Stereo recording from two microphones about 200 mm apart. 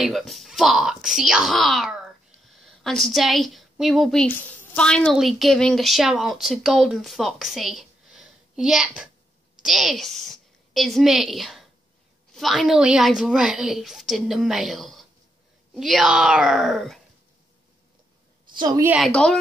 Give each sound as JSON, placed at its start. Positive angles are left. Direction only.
{"t": 0.0, "sound": "a woman's voice", "side_deg": 0}
{"t": 18.5, "sound": "a woman's voice", "side_deg": -20}
{"t": 18.9, "sound": "a woman's voice", "side_deg": 0}